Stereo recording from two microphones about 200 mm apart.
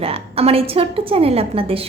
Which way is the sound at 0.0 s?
30° right (ahead or behind).